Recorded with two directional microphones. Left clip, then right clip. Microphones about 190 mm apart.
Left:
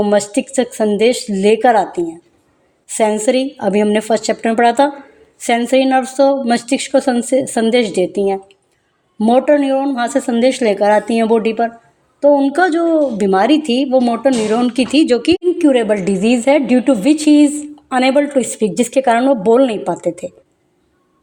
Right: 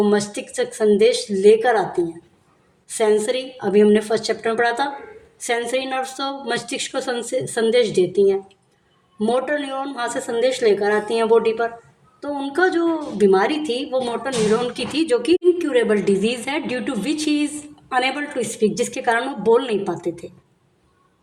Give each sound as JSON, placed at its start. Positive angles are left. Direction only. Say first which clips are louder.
{"t": 0.0, "sound": "a woman's voice", "louder": "left 5 dB", "side_deg": 50}